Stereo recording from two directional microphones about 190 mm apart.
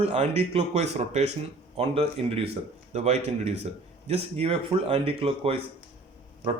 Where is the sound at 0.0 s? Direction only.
35° right (ahead or behind).